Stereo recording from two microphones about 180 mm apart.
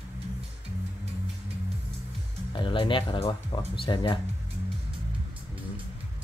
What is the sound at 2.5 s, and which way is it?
Speech, 25° left (ahead or behind).